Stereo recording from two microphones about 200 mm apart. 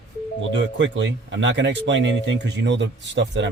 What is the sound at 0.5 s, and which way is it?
Speech, 65° right (ahead or behind).